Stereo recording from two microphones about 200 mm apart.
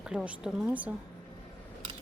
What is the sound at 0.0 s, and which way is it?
Speech, 5° right (ahead or behind).